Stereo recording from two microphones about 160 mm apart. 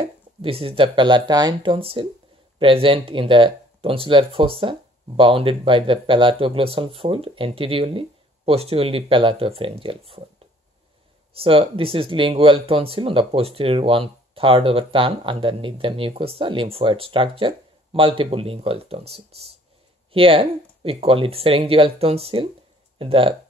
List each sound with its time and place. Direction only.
0.4 s speech: 35° right (ahead or behind)
11.3 s speech: 35° right (ahead or behind)